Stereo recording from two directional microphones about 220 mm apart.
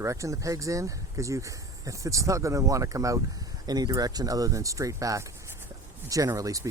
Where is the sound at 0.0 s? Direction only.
15° right (ahead or behind).